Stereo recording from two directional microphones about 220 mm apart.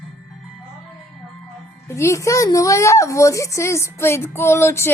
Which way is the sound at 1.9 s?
15° left (ahead or behind).